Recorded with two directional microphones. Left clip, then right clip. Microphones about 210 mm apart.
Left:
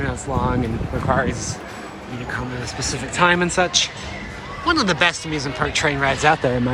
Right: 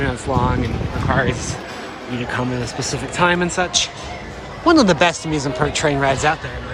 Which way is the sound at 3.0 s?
10° right (ahead or behind).